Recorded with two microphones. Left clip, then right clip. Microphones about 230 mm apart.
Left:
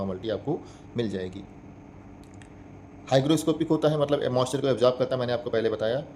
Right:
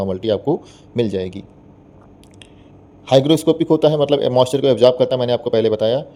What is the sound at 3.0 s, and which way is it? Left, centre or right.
Speech, right.